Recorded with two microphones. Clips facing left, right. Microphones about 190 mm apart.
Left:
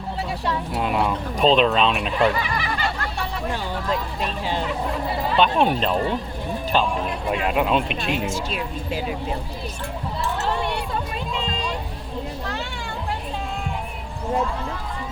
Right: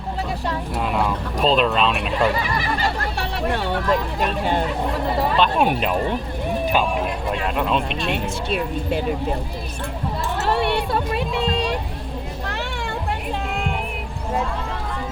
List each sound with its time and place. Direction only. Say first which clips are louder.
0.8 s speech: even; centre (ahead or behind)
3.3 s speech: right 7 dB; 70° right (ahead or behind)
5.4 s speech: left 2 dB; 10° right (ahead or behind)
7.4 s speech: left 2 dB; 5° left (ahead or behind)
8.4 s speech: right 5 dB; 55° right (ahead or behind)
10.4 s vehicle: right 8 dB; 70° right (ahead or behind)
13.5 s music: right 4 dB; 75° right (ahead or behind)